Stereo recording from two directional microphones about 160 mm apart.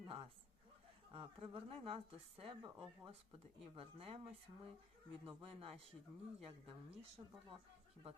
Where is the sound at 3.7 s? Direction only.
35° right (ahead or behind).